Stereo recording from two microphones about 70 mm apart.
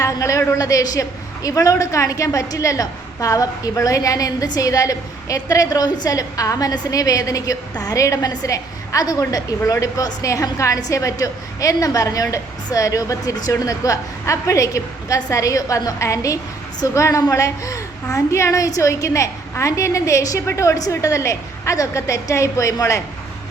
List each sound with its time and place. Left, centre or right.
0.0 s a man's voice: left